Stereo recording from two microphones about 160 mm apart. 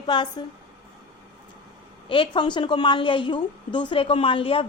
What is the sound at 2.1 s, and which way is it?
A woman's voice, 30° left (ahead or behind).